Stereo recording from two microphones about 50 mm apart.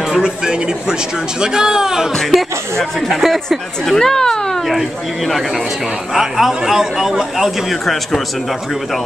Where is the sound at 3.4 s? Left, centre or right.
Centre.